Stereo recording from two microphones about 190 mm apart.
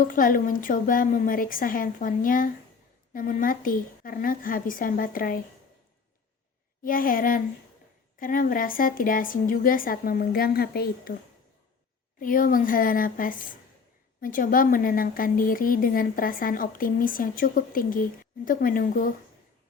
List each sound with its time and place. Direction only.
0.0 s a woman's voice: 45° left (ahead or behind)
6.8 s a woman's voice: 45° left (ahead or behind)
12.2 s a woman's voice: 45° left (ahead or behind)